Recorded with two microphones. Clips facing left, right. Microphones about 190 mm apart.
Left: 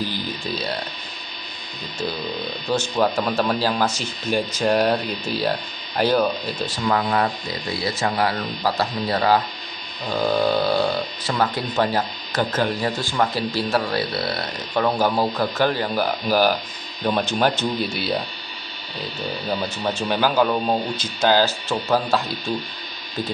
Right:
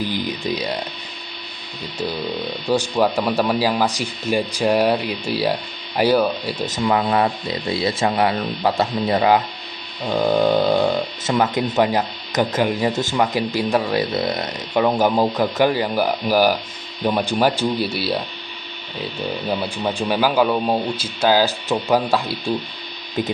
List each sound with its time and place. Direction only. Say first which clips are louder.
2.7 s speech: right 3 dB; 10° right (ahead or behind)
6.7 s speech: right 3 dB; 20° right (ahead or behind); by 18.2 s 5° right (ahead or behind)
19.4 s speech: right 1 dB; 10° right (ahead or behind)